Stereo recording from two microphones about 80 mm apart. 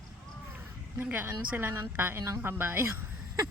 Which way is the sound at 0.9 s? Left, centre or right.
Right.